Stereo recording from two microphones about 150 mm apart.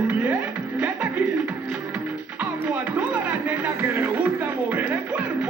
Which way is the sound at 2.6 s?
10° right (ahead or behind).